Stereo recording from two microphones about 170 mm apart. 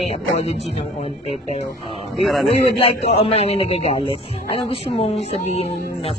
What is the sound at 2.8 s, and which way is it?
A man's voice, 40° left (ahead or behind).